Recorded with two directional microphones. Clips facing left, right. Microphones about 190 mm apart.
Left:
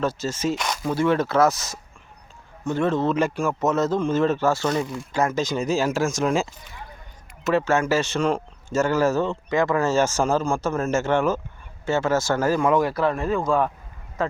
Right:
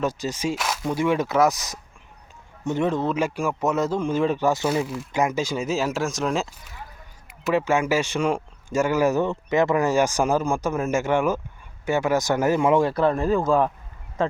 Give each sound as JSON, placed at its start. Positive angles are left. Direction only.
{"t": 0.0, "sound": "speech", "side_deg": -15}
{"t": 0.9, "sound": "speech", "side_deg": -15}
{"t": 7.4, "sound": "speech", "side_deg": -15}
{"t": 13.4, "sound": "speech", "side_deg": -5}